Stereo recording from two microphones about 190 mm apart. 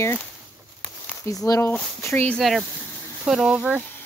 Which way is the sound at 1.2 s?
20° left (ahead or behind).